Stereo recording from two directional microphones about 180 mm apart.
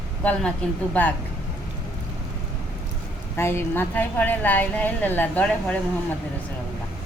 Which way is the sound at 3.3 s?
15° left (ahead or behind).